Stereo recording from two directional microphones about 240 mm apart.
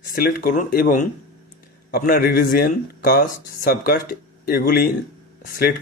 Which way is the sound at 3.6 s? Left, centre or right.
Left.